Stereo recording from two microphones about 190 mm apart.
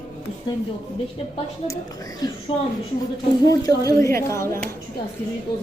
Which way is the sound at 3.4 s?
15° left (ahead or behind).